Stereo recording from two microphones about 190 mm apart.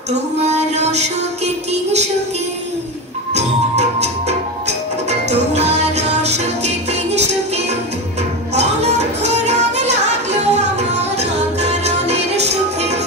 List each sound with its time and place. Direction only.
0.1 s music: 35° right (ahead or behind)
3.3 s music: 35° right (ahead or behind)
5.5 s music: 35° right (ahead or behind)